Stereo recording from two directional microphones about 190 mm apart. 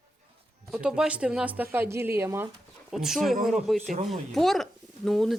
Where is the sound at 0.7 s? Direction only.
5° right (ahead or behind).